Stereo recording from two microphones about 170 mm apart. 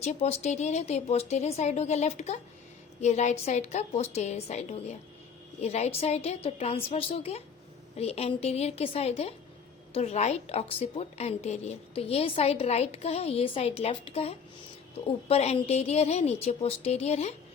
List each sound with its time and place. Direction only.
0.0 s a woman's voice: 40° left (ahead or behind)